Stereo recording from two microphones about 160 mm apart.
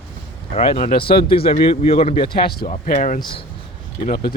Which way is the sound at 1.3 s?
35° left (ahead or behind).